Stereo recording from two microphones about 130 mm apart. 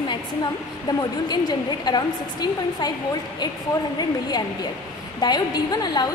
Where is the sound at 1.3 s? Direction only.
35° left (ahead or behind).